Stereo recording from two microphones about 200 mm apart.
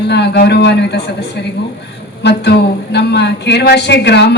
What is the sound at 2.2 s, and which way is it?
Speech, 55° left (ahead or behind).